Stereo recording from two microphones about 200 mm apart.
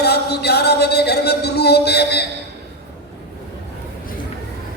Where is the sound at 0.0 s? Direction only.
55° left (ahead or behind).